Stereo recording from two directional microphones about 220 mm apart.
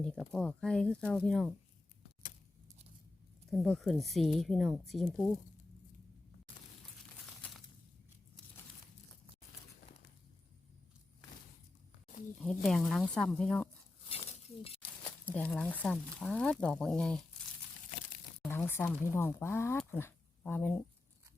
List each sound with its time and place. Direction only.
0.0 s speech: 5° left (ahead or behind)
3.5 s speech: centre (ahead or behind)
12.6 s speech: centre (ahead or behind)
14.1 s a sound: 30° left (ahead or behind)
15.3 s speech: 5° left (ahead or behind)
18.4 s speech: 10° left (ahead or behind)